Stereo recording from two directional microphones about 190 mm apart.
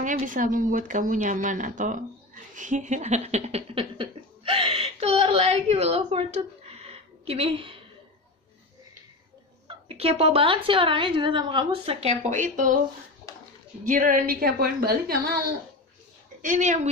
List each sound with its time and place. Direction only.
0.0 s a woman's voice: 45° right (ahead or behind)
2.5 s a sound: 40° right (ahead or behind)
9.7 s speech: 30° right (ahead or behind)
13.3 s a sound: 20° left (ahead or behind)
13.8 s a woman's voice: 45° right (ahead or behind)
16.3 s a woman's voice: 40° right (ahead or behind)